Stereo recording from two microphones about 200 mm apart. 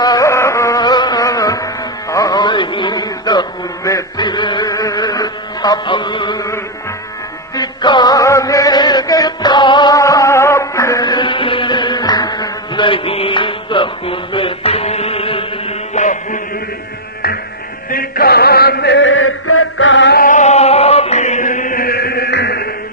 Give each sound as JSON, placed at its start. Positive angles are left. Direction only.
{"t": 0.0, "sound": "music", "side_deg": 15}
{"t": 3.8, "sound": "a sound", "side_deg": 20}
{"t": 7.5, "sound": "music", "side_deg": 20}
{"t": 17.2, "sound": "music", "side_deg": 50}